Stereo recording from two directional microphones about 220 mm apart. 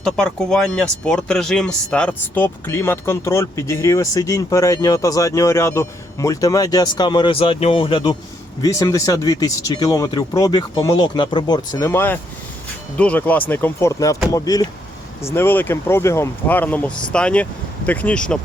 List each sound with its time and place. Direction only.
0.0 s speech: 5° left (ahead or behind)